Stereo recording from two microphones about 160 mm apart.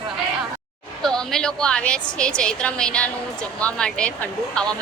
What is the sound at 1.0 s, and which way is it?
A woman's voice, 5° left (ahead or behind).